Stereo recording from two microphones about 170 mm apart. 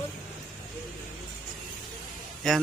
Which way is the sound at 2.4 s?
5° left (ahead or behind).